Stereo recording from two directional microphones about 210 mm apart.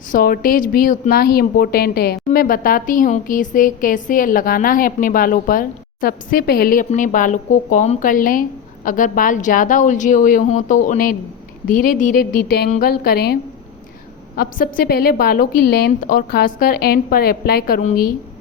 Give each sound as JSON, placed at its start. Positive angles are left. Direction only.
{"t": 0.1, "sound": "a woman's voice", "side_deg": 45}
{"t": 17.7, "sound": "speech", "side_deg": 35}